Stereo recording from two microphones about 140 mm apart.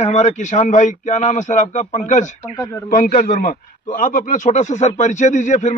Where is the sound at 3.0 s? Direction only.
70° left (ahead or behind).